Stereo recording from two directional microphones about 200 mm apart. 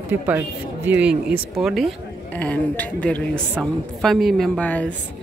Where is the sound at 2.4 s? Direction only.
10° left (ahead or behind).